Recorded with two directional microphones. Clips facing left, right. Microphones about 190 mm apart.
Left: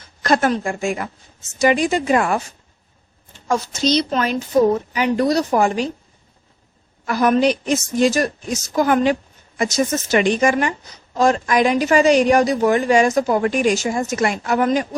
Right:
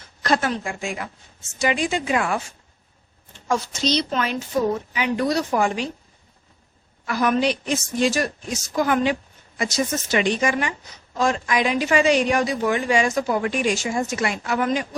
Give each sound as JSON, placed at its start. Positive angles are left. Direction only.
{"t": 0.2, "sound": "a woman's voice", "side_deg": 45}
{"t": 3.5, "sound": "a woman's voice", "side_deg": 45}
{"t": 7.0, "sound": "a woman's voice", "side_deg": 45}